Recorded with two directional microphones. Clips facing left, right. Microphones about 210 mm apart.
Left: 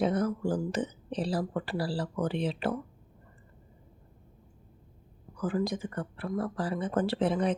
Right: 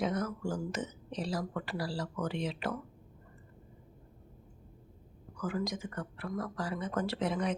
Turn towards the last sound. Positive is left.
turn(degrees=30)  # may be behind; listen again after turning